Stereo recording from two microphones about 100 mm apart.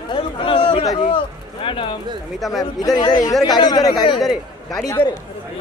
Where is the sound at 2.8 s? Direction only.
35° left (ahead or behind).